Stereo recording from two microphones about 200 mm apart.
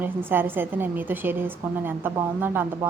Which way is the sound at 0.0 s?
10° right (ahead or behind).